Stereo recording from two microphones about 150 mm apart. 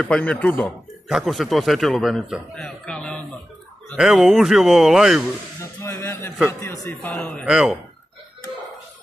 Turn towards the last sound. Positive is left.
turn(degrees=-5)  # may be behind; listen again after turning